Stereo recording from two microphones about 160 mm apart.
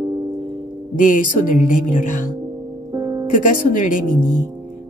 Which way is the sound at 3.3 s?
55° left (ahead or behind).